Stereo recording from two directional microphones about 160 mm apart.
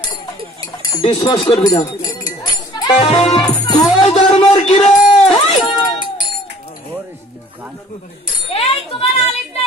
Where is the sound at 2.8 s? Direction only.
30° left (ahead or behind).